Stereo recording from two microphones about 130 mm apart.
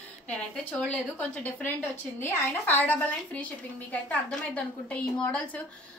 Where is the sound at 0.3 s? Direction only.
5° left (ahead or behind).